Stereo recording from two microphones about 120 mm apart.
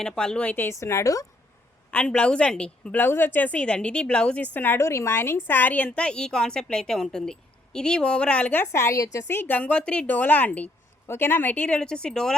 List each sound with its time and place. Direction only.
0.0 s a woman's voice: 5° left (ahead or behind); by 1.3 s 25° left (ahead or behind)
1.9 s a woman's voice: 10° left (ahead or behind)
8.6 s a woman's voice: 25° left (ahead or behind); by 12.3 s 5° left (ahead or behind)